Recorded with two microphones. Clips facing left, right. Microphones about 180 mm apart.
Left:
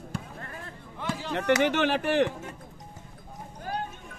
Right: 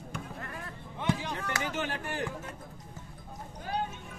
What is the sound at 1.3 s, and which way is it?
Speech, 90° left.